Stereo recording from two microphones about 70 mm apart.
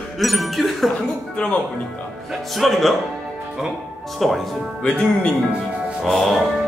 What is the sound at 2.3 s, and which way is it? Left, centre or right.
Speech, centre.